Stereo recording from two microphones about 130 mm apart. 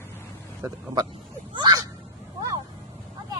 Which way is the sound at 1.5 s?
35° right (ahead or behind).